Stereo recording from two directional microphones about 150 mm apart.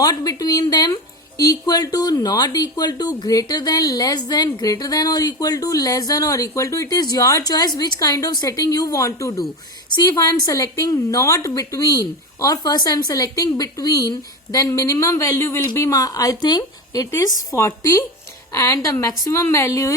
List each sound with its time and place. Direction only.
0.0 s speech: 25° left (ahead or behind)